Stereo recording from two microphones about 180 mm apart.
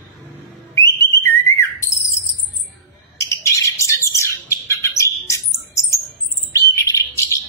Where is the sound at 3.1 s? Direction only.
15° left (ahead or behind).